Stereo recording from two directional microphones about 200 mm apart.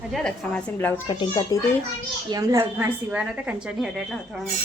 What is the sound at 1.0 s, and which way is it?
Speech, 25° left (ahead or behind).